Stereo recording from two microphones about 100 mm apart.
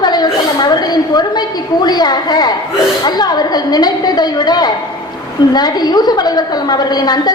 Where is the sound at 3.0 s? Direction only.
45° left (ahead or behind).